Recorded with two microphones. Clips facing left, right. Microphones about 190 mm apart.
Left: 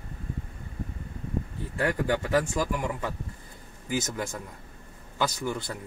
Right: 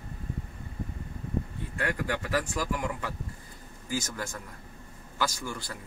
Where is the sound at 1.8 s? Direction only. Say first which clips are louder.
Left 5 dB; 25° left (ahead or behind).